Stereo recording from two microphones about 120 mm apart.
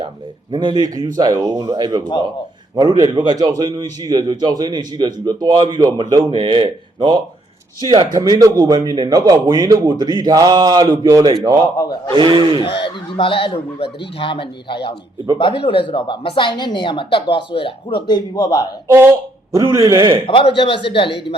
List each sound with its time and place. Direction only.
0.5 s a man's voice: 40° right (ahead or behind)
1.7 s a man's voice: 40° right (ahead or behind)
11.8 s a man's voice: 30° left (ahead or behind)
12.2 s a man's voice: 40° right (ahead or behind)
12.6 s a woman's voice: 45° left (ahead or behind)
18.9 s speech: 25° right (ahead or behind)
20.2 s a woman's voice: 50° left (ahead or behind)